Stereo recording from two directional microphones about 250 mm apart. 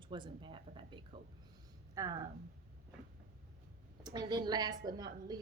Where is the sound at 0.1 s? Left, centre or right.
Centre.